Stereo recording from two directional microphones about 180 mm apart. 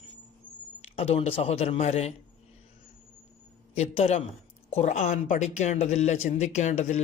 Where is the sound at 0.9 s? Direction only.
35° left (ahead or behind).